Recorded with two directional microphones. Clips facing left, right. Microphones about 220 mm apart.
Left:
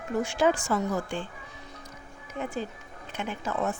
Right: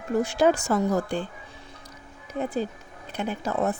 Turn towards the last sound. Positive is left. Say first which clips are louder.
# right 4 dB
turn(degrees=-35)  # may be behind; listen again after turning